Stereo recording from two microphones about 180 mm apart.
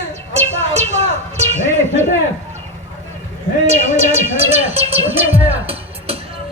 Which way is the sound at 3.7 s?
35° right (ahead or behind).